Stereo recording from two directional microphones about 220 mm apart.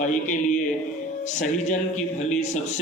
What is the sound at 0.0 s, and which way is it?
A man's voice, 35° left (ahead or behind).